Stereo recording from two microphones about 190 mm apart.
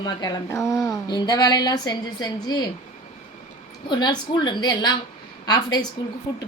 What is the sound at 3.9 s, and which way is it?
Speech, 25° left (ahead or behind).